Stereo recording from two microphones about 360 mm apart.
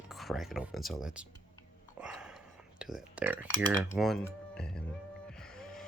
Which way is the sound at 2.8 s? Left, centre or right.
Centre.